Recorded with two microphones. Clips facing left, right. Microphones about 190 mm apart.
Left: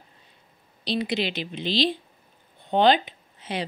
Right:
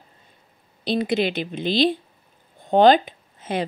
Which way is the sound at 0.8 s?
50° right (ahead or behind).